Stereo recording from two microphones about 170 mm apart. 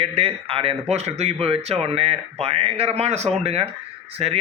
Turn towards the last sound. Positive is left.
turn(degrees=-35)  # may be behind; listen again after turning